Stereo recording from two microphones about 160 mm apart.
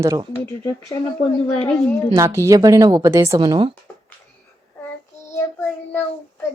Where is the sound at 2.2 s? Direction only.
20° right (ahead or behind).